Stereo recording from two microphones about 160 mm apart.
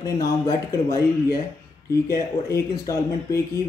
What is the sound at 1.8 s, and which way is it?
Speech, 20° left (ahead or behind).